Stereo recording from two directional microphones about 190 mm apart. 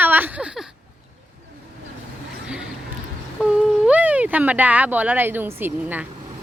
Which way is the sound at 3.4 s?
5° right (ahead or behind).